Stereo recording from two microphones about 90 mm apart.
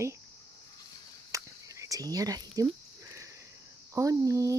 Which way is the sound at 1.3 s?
40° right (ahead or behind).